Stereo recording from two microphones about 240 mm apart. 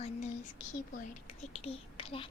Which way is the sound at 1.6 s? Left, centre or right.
Left.